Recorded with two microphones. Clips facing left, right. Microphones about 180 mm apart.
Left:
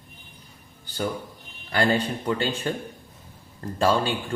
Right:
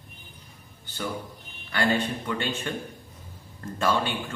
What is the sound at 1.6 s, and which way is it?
A man's voice, 35° left (ahead or behind).